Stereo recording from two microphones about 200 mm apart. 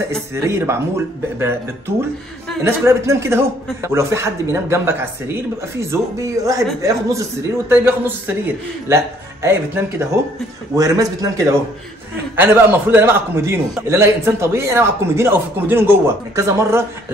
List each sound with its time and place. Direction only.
0.3 s a man's voice: 10° right (ahead or behind)